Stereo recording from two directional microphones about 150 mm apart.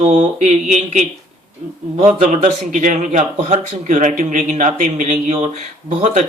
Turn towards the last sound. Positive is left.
turn(degrees=-50)  # may be behind; listen again after turning